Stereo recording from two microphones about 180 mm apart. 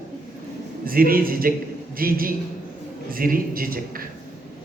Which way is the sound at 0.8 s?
55° right (ahead or behind).